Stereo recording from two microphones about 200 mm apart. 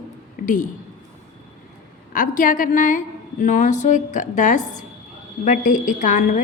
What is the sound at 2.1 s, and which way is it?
A woman's voice, 45° left (ahead or behind).